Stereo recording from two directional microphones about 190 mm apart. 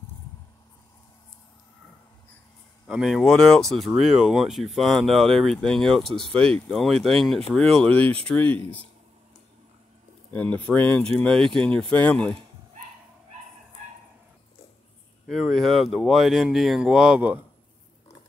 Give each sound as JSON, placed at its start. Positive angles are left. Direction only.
{"t": 2.9, "sound": "speech", "side_deg": 0}
{"t": 10.3, "sound": "speech", "side_deg": 5}
{"t": 15.2, "sound": "speech", "side_deg": 0}